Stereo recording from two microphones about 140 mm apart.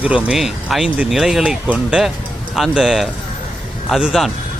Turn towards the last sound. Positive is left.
turn(degrees=0)  # may be behind; listen again after turning